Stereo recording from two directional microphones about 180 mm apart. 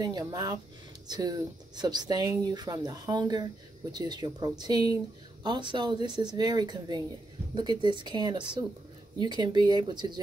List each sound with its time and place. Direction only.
0.0 s speech: 20° right (ahead or behind)